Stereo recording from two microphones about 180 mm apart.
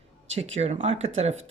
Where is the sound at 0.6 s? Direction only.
35° right (ahead or behind).